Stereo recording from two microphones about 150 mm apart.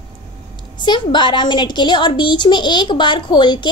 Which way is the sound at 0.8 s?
30° left (ahead or behind).